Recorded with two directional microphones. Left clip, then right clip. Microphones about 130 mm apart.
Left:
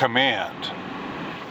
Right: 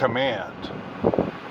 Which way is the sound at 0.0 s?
20° left (ahead or behind).